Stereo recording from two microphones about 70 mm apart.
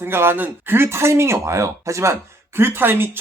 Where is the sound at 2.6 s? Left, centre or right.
Right.